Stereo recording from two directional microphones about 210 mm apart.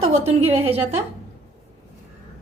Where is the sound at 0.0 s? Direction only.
30° right (ahead or behind).